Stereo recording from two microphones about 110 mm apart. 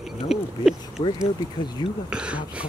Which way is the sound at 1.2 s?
40° left (ahead or behind).